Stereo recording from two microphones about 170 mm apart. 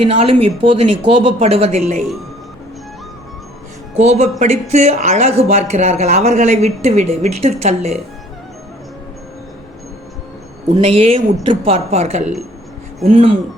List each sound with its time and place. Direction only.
0.0 s speech: 35° right (ahead or behind)
3.9 s speech: 40° right (ahead or behind)
10.8 s speech: 35° right (ahead or behind)